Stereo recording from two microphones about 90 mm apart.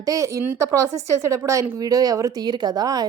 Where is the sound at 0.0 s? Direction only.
35° right (ahead or behind).